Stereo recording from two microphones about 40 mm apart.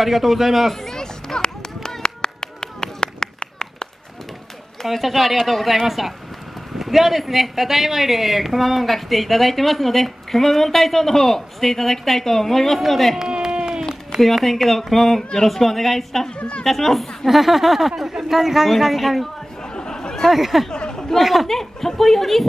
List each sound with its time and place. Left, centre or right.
0.0 s speech: centre
0.8 s clapping: centre
4.8 s speech: centre
13.4 s a sound: centre
14.2 s speech: centre
16.3 s a woman's voice: left
16.6 s speech: centre
19.7 s chatter: left
20.2 s speech: centre
20.7 s chatter: left
21.2 s speech: centre